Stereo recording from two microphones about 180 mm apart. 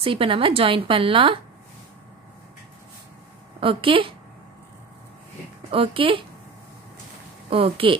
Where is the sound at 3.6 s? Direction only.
30° right (ahead or behind).